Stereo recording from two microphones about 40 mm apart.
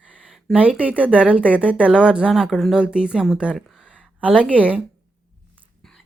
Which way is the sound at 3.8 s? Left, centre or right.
Right.